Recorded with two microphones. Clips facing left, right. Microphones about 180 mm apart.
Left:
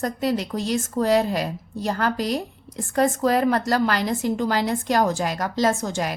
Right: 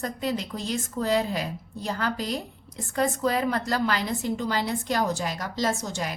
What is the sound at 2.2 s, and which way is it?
Speech, 90° left.